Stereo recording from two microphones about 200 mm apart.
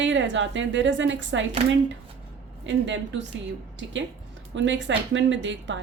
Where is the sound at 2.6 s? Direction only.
65° right (ahead or behind).